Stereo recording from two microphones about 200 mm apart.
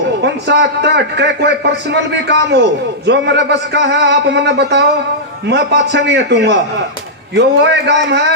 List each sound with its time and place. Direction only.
0.2 s a man's voice: 60° right (ahead or behind)